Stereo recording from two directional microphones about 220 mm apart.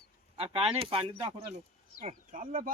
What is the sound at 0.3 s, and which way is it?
Speech, 25° right (ahead or behind).